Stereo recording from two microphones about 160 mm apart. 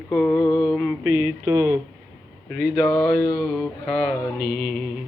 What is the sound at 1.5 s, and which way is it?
Speech, 15° right (ahead or behind).